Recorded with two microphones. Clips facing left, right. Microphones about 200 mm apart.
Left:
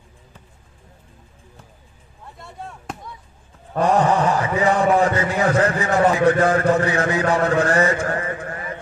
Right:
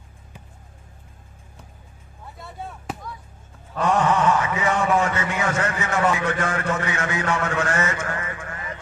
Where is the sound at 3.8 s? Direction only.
35° left (ahead or behind).